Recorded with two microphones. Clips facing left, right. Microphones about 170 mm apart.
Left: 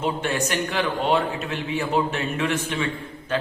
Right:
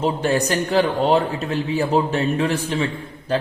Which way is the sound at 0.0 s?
35° right (ahead or behind).